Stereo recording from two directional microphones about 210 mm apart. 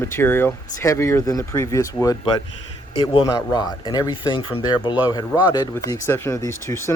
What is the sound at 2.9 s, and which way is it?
Speech, 25° left (ahead or behind).